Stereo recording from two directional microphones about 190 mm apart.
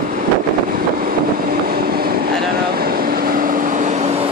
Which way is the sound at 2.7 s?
50° right (ahead or behind).